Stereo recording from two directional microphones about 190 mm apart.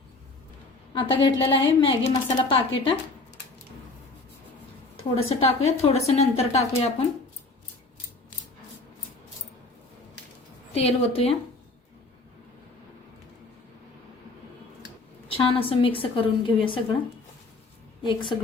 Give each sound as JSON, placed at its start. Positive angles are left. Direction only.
{"t": 0.9, "sound": "a woman's voice", "side_deg": 25}
{"t": 5.1, "sound": "a woman's voice", "side_deg": 30}
{"t": 10.8, "sound": "a woman's voice", "side_deg": 30}
{"t": 15.3, "sound": "a woman's voice", "side_deg": 30}
{"t": 18.0, "sound": "a woman's voice", "side_deg": 25}